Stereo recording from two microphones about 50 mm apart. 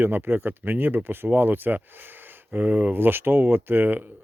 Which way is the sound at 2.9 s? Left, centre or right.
Right.